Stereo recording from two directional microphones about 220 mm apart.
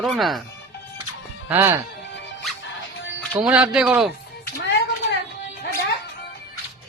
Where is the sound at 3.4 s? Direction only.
5° right (ahead or behind).